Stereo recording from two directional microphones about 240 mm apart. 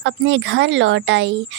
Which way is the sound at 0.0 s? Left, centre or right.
Right.